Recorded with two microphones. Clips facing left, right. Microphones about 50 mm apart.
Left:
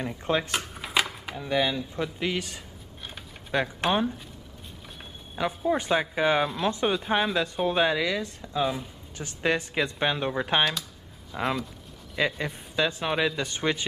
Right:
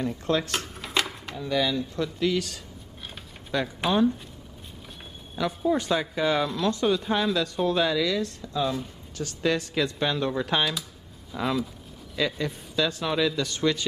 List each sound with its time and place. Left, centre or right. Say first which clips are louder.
0.0 s speech: right 1 dB; left
0.5 s a sound: even; centre
1.4 s speech: even; left
5.7 s speech: even; left
10.6 s speech: left 1 dB; centre
11.3 s speech: right 1 dB; centre